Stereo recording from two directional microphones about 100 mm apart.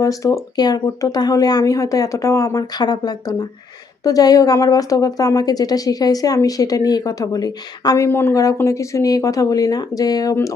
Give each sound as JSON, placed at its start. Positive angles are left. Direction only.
{"t": 0.0, "sound": "a woman's voice", "side_deg": 35}